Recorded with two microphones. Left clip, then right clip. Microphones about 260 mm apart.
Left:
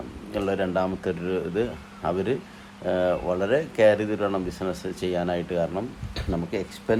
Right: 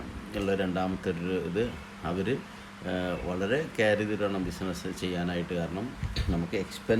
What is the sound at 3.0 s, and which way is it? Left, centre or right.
Speech, left.